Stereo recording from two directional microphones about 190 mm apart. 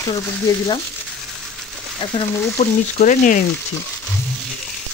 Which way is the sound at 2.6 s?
40° left (ahead or behind).